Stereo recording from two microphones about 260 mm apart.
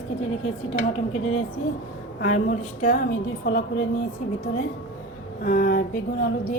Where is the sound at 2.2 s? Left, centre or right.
Left.